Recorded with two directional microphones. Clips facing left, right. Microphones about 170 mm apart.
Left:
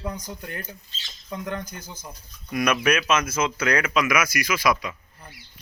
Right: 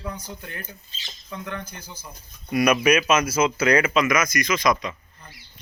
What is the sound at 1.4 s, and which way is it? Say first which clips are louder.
Speech: left 3 dB; 40° left (ahead or behind).